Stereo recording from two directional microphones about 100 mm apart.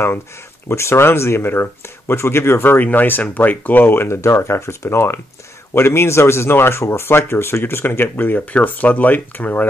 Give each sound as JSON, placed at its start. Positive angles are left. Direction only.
{"t": 0.7, "sound": "speech", "side_deg": 25}